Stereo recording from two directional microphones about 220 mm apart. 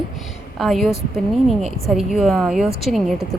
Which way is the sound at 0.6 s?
Centre (ahead or behind).